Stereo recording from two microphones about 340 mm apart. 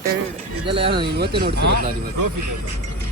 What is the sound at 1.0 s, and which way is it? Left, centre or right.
Speech, right.